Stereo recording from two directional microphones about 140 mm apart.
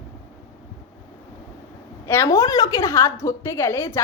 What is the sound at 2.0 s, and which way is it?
A woman's voice, 20° left (ahead or behind).